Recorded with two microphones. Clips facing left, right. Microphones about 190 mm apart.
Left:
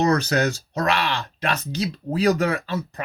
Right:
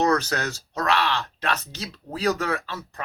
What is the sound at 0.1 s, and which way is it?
Speech, 20° left (ahead or behind).